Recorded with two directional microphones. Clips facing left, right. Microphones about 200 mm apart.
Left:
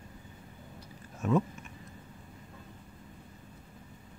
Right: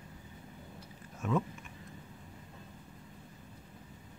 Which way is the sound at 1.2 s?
40° left (ahead or behind).